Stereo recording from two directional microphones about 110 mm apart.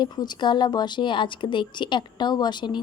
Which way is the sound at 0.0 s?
40° left (ahead or behind).